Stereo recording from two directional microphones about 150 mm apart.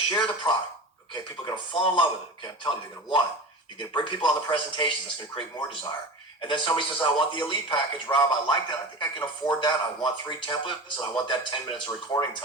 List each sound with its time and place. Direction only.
0.4 s a man's voice: 30° left (ahead or behind)